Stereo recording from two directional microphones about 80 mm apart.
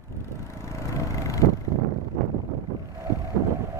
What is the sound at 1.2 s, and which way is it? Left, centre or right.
Vehicle, left.